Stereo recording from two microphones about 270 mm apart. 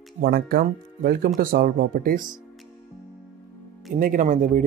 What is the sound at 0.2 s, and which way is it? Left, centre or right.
Speech, right.